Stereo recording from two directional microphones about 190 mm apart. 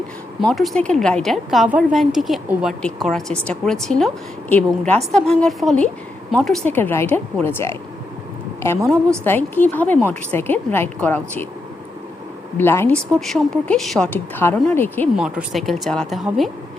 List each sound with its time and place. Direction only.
0.3 s a woman's voice: centre (ahead or behind)
8.8 s a woman's voice: 15° right (ahead or behind)
9.2 s a woman's voice: 10° left (ahead or behind)
12.5 s a woman's voice: 10° left (ahead or behind)
13.1 s a woman's voice: centre (ahead or behind)
15.1 s a woman's voice: 5° right (ahead or behind)